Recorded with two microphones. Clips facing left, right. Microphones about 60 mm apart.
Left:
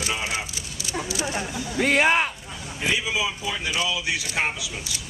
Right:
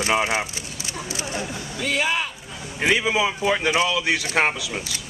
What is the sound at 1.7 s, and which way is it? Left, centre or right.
Speech, left.